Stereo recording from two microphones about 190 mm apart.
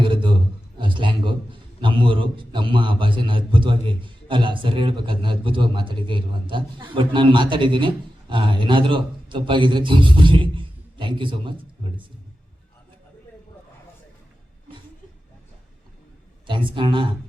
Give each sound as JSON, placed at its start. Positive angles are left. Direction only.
{"t": 0.0, "sound": "a sound", "side_deg": -25}
{"t": 0.8, "sound": "a man's voice", "side_deg": -25}
{"t": 16.5, "sound": "a man's voice", "side_deg": -25}